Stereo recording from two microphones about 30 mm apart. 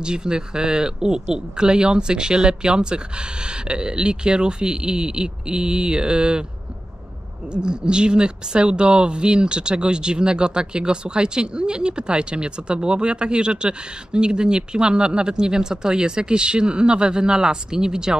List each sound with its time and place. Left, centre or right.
0.0 s speech: right
7.5 s speech: right